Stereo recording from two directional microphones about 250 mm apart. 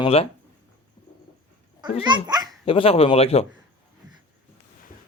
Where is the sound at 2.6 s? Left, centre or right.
Left.